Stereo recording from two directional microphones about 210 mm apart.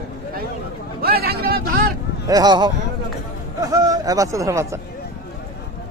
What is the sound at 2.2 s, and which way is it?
Speech, 20° right (ahead or behind).